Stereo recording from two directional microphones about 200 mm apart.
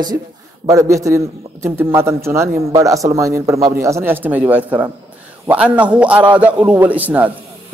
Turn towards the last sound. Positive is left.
turn(degrees=-10)  # may be behind; listen again after turning